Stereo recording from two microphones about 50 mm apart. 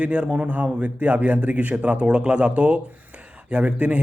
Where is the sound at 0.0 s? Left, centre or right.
Right.